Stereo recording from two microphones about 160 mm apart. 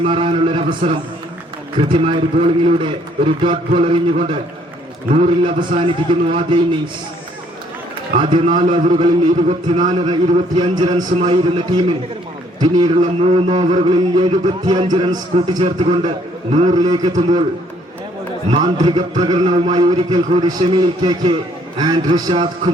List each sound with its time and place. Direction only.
0.0 s a man's voice: 35° right (ahead or behind)
5.1 s a man's voice: 35° right (ahead or behind)
8.2 s a man's voice: 30° right (ahead or behind)
16.7 s a man's voice: 25° right (ahead or behind)
18.5 s a man's voice: 30° right (ahead or behind)